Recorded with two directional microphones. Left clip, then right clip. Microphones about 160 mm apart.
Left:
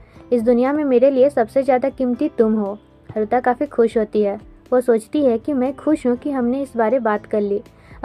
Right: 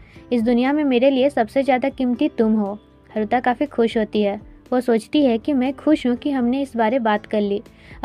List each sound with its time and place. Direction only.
0.3 s a woman's voice: 30° right (ahead or behind)
2.7 s a woman's voice: 40° right (ahead or behind)